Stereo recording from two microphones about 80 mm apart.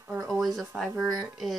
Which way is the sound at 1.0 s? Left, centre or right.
Right.